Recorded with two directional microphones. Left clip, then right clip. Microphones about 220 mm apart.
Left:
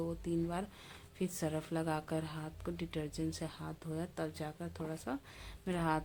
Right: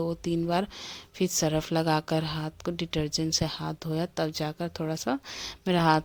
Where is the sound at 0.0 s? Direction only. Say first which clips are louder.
Right 9 dB; 40° right (ahead or behind).